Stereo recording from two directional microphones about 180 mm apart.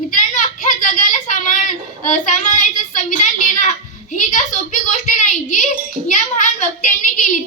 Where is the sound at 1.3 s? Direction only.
45° left (ahead or behind).